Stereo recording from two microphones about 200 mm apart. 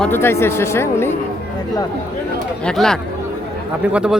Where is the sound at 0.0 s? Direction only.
10° left (ahead or behind).